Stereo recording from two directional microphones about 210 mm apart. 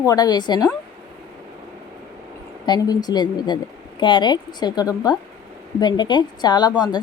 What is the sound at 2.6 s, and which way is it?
A woman's voice, 20° left (ahead or behind).